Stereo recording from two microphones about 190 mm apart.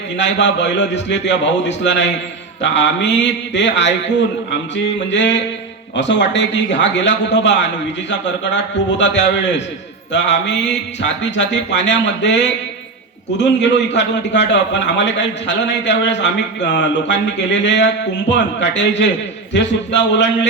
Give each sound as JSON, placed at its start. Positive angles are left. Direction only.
{"t": 0.2, "sound": "a man's voice", "side_deg": 70}
{"t": 5.1, "sound": "a man's voice", "side_deg": 70}